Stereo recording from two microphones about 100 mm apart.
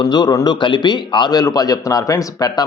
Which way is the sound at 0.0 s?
45° left (ahead or behind).